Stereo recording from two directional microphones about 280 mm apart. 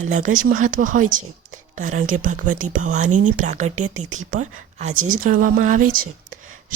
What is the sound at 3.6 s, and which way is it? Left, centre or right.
Speech, right.